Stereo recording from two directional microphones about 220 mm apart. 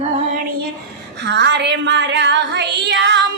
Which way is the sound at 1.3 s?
50° right (ahead or behind).